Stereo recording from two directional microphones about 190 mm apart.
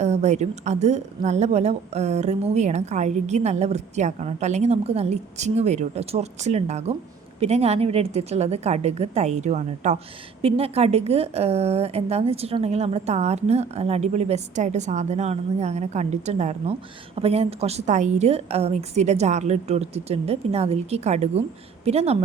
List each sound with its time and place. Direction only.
0.0 s a woman's voice: 35° right (ahead or behind)